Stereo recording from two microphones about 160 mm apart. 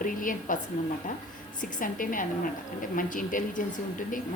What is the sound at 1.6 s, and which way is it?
A woman's voice, 55° left (ahead or behind).